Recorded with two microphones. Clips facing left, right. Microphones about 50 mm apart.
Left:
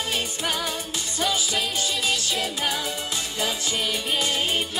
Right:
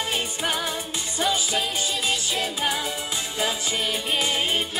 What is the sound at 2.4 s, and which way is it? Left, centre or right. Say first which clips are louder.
Music: right 1 dB; centre.